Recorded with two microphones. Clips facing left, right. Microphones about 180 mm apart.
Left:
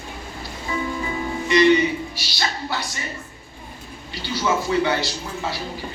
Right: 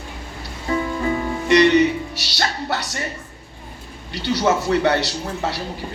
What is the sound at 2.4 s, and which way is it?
Music, 65° right (ahead or behind).